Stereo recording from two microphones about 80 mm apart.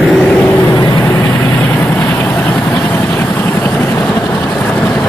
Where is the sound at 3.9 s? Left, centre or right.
Centre.